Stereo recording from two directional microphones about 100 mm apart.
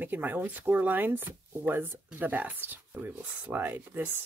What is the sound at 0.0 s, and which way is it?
Speech, 20° right (ahead or behind).